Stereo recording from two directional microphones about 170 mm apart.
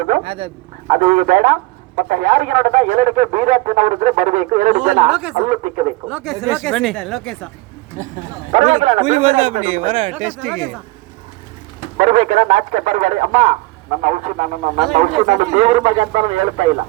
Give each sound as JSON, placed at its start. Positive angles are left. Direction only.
{"t": 0.1, "sound": "a man's voice", "side_deg": -35}
{"t": 5.0, "sound": "speech", "side_deg": -5}
{"t": 5.5, "sound": "speech", "side_deg": -40}
{"t": 6.1, "sound": "speech", "side_deg": -5}
{"t": 8.5, "sound": "speech", "side_deg": -45}
{"t": 10.4, "sound": "speech", "side_deg": 0}
{"t": 11.9, "sound": "speech", "side_deg": -45}